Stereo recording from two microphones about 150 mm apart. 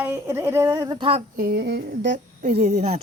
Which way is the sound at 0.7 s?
25° right (ahead or behind).